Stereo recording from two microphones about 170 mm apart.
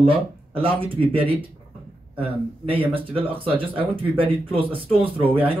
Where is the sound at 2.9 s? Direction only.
30° right (ahead or behind).